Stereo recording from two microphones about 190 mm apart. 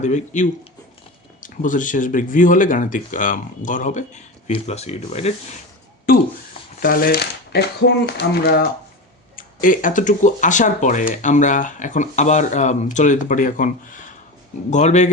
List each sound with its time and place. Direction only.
0.0 s speech: 40° left (ahead or behind)
6.7 s speech: 50° left (ahead or behind)
9.3 s speech: 45° left (ahead or behind)